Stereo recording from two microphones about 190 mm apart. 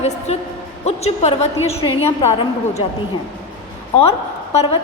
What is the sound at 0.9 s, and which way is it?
A woman's voice, 35° left (ahead or behind).